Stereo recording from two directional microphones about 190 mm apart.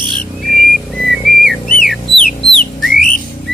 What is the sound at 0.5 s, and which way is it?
Whistle, centre (ahead or behind).